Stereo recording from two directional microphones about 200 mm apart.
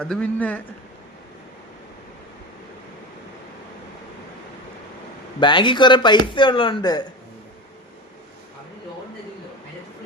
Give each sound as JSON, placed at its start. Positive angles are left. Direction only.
{"t": 0.0, "sound": "speech", "side_deg": 5}
{"t": 5.4, "sound": "speech", "side_deg": 25}